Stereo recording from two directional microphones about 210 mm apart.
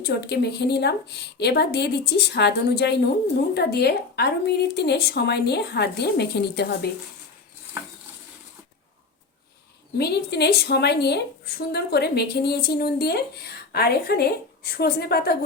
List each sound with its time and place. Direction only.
0.0 s a woman's voice: 50° left (ahead or behind)
10.0 s a woman's voice: 50° left (ahead or behind)